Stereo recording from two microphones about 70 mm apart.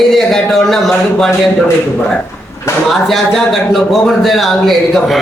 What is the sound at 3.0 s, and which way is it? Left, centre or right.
Speech, centre.